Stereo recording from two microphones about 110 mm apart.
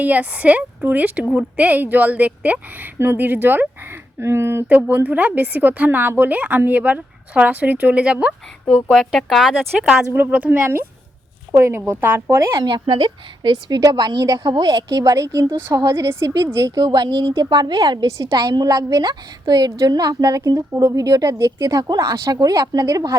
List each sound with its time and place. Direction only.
0.0 s a woman's voice: 15° right (ahead or behind)
8.6 s a woman's voice: 5° left (ahead or behind)
10.1 s a woman's voice: 20° right (ahead or behind)
12.8 s a woman's voice: 50° right (ahead or behind); by 23.1 s 35° right (ahead or behind)